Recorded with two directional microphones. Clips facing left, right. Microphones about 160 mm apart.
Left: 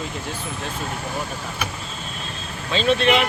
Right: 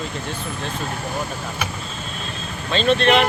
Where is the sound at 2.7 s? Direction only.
10° left (ahead or behind).